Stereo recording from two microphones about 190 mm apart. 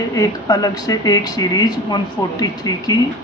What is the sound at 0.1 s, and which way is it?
Speech, 15° left (ahead or behind).